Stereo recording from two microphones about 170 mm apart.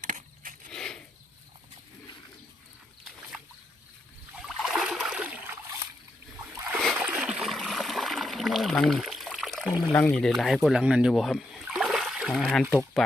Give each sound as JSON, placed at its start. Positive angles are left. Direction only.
{"t": 0.0, "sound": "biting", "side_deg": -50}
{"t": 0.7, "sound": "a sound", "side_deg": 5}
{"t": 4.4, "sound": "splash", "side_deg": 0}
{"t": 6.7, "sound": "splash", "side_deg": -5}
{"t": 9.9, "sound": "speech", "side_deg": 10}